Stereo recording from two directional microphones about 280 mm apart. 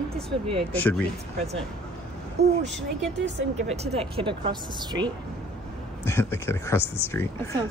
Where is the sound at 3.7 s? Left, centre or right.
Right.